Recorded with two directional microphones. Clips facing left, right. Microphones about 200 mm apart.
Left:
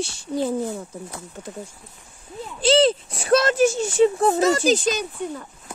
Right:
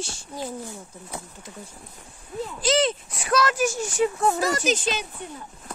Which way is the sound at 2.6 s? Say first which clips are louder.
Left 6 dB; 30° left (ahead or behind).